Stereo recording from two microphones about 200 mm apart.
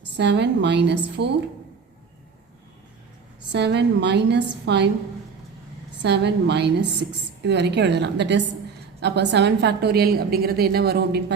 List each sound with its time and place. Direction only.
0.2 s a woman's voice: 60° right (ahead or behind)
3.5 s a woman's voice: 60° right (ahead or behind)
6.0 s a woman's voice: 60° right (ahead or behind)